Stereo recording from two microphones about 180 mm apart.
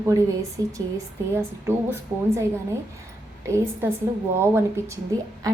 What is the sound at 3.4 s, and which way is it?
A woman's voice, 15° right (ahead or behind).